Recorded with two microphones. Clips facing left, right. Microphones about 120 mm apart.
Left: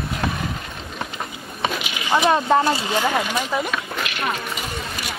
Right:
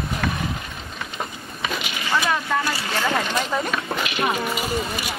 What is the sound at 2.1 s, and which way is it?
Speech, 25° left (ahead or behind).